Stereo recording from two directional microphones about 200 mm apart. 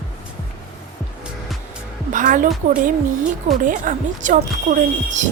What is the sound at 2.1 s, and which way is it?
Speech, 40° right (ahead or behind).